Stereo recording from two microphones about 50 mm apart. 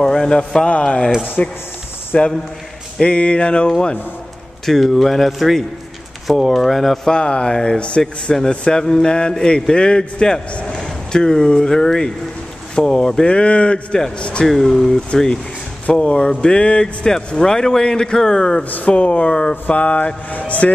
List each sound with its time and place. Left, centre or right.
0.0 s a sound: centre
0.7 s speech: left
4.6 s speech: centre
7.1 s speech: centre
13.9 s speech: centre
15.9 s speech: left
18.6 s speech: left